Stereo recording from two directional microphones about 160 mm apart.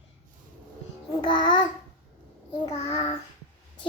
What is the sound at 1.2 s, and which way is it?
Child singing, 30° left (ahead or behind).